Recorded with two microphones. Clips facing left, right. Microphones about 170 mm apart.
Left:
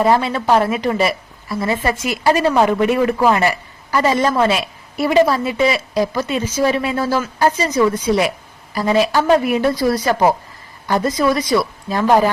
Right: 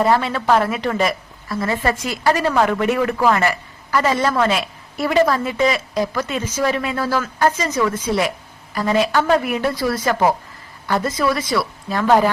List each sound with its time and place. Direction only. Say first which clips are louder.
0.0 s a woman's voice: left 2 dB; 15° left (ahead or behind)
6.7 s a woman's voice: left 2 dB; 20° left (ahead or behind)
9.6 s a woman's voice: left 4 dB; 40° left (ahead or behind)
10.8 s a woman's voice: left 3 dB; 15° left (ahead or behind)